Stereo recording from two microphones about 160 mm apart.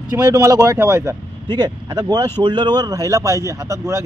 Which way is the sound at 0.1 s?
20° right (ahead or behind).